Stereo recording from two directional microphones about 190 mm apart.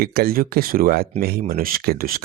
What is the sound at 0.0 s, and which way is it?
Speech, 50° right (ahead or behind).